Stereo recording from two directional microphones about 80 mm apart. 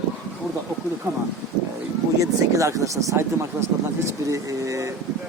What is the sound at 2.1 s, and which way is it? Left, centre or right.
Speech, right.